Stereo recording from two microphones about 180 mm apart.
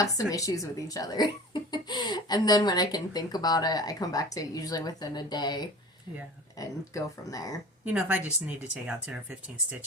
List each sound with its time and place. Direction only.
0.0 s speech: 20° left (ahead or behind)
7.9 s speech: 10° right (ahead or behind)